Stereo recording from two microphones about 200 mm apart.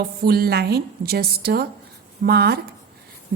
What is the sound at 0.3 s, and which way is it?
A woman's voice, 50° right (ahead or behind).